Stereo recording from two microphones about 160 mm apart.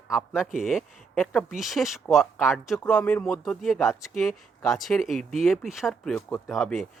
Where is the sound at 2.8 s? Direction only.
10° left (ahead or behind).